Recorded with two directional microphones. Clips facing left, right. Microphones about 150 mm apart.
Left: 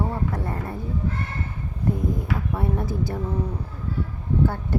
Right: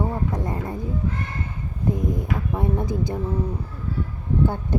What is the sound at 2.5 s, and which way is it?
Speech, 20° right (ahead or behind).